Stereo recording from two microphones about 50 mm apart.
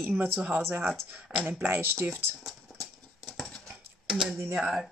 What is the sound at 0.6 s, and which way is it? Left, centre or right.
Speech, right.